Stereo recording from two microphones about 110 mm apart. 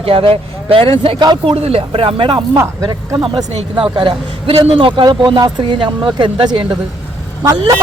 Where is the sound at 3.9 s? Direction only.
50° right (ahead or behind).